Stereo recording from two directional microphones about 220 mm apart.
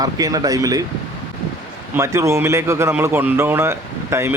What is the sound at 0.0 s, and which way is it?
Speech, 15° right (ahead or behind).